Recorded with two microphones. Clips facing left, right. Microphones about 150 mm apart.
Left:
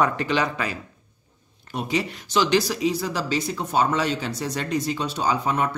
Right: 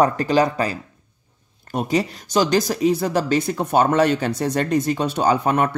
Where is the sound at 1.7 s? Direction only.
45° right (ahead or behind).